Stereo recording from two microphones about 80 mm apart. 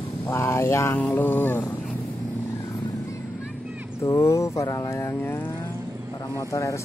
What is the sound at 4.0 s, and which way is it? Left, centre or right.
Speech, left.